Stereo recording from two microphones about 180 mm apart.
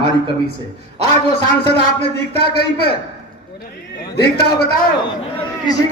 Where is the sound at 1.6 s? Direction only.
65° left (ahead or behind).